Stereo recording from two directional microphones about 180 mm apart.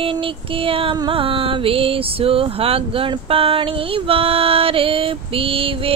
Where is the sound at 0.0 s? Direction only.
30° right (ahead or behind).